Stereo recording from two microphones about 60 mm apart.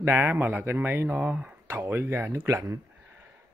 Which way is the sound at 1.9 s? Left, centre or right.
Right.